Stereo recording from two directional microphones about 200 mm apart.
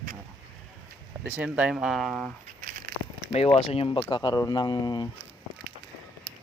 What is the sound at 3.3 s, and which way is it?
Speech, 30° left (ahead or behind).